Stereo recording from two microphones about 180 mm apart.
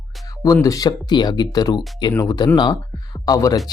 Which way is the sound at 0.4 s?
20° left (ahead or behind).